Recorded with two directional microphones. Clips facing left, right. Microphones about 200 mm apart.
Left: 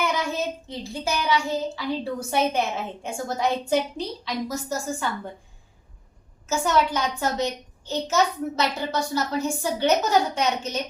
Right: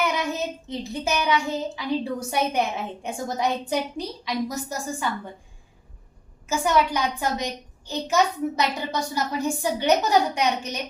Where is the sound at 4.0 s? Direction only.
15° right (ahead or behind).